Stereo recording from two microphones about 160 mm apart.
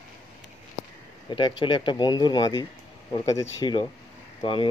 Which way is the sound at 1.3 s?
30° left (ahead or behind).